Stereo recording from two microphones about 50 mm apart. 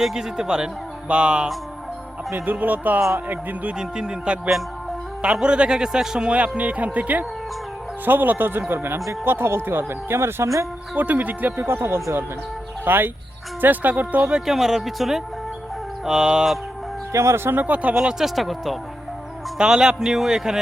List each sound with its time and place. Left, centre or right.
0.0 s speech: centre
2.3 s a man's voice: right
3.8 s a man's voice: centre; by 10.5 s right
10.9 s speech: right
11.6 s speech: right
12.8 s speech: right
14.3 s speech: centre
14.5 s speech: centre
17.1 s speech: right
17.9 s speech: centre
18.3 s speech: centre
19.5 s speech: centre